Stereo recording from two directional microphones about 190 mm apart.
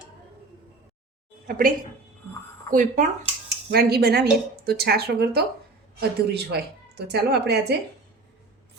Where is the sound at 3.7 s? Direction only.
55° right (ahead or behind).